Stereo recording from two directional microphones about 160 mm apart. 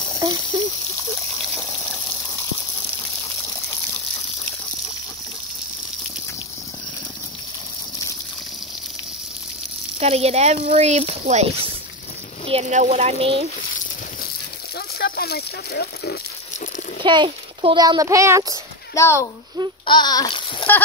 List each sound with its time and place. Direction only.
0.5 s speech: 30° right (ahead or behind)
1.4 s water: 5° left (ahead or behind)
9.9 s speech: 40° right (ahead or behind)
15.0 s speech: 80° left
17.0 s a child's voice: 30° right (ahead or behind)
18.9 s a child's voice: 15° left (ahead or behind)